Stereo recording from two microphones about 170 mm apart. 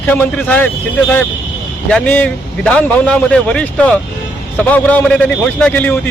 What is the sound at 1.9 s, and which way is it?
A man's voice, 5° left (ahead or behind).